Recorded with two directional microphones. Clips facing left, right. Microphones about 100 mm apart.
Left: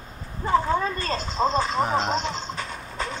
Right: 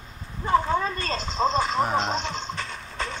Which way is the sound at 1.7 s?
Centre (ahead or behind).